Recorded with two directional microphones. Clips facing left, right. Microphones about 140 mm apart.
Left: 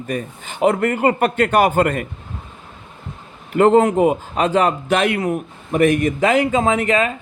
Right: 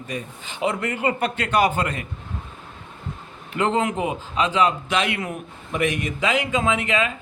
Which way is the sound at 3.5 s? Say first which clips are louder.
Left 9 dB; 50° left (ahead or behind).